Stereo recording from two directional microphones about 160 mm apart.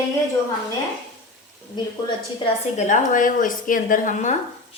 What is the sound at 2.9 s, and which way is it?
A woman's voice, 55° left (ahead or behind).